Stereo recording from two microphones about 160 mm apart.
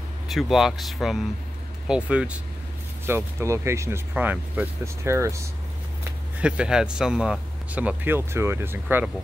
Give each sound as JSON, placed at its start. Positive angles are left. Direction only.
{"t": 0.3, "sound": "speech", "side_deg": 0}
{"t": 6.4, "sound": "speech", "side_deg": -5}